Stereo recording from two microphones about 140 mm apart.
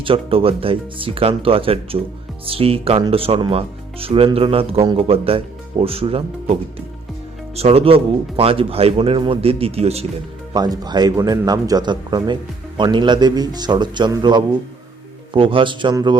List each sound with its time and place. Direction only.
0.0 s speech: 40° right (ahead or behind)
10.5 s speech: 30° right (ahead or behind)